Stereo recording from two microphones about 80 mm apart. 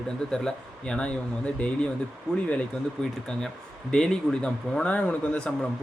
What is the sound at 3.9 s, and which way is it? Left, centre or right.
Speech, centre.